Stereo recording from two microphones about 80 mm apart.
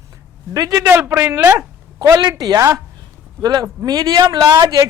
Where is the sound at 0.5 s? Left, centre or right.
Right.